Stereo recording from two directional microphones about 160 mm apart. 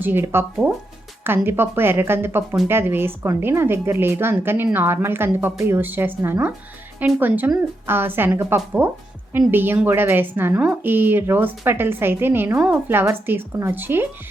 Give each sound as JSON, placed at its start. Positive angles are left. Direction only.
{"t": 0.0, "sound": "a woman's voice", "side_deg": -15}